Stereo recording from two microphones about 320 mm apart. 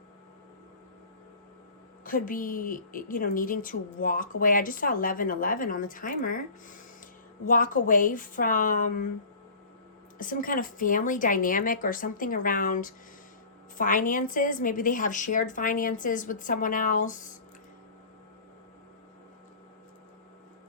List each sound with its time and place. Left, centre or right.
2.0 s a woman's voice: left
10.2 s a woman's voice: left